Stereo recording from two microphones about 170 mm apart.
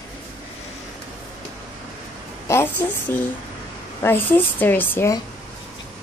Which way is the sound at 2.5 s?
10° left (ahead or behind).